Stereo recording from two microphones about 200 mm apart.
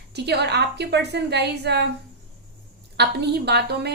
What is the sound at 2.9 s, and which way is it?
Speech, 55° right (ahead or behind).